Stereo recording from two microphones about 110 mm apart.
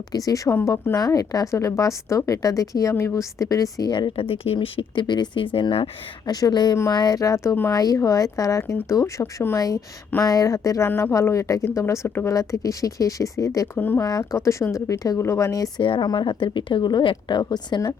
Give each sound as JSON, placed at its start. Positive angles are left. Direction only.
{"t": 0.3, "sound": "a woman's voice", "side_deg": 30}
{"t": 6.3, "sound": "a woman's voice", "side_deg": 35}
{"t": 7.7, "sound": "a woman's voice", "side_deg": 35}
{"t": 13.7, "sound": "speech", "side_deg": 20}
{"t": 14.0, "sound": "a woman's voice", "side_deg": 35}
{"t": 15.8, "sound": "a woman's voice", "side_deg": 50}